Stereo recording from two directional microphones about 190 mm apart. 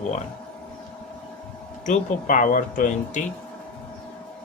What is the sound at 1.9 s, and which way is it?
Speech, 45° left (ahead or behind).